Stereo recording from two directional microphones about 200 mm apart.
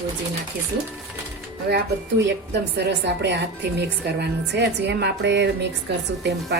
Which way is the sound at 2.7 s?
60° right (ahead or behind).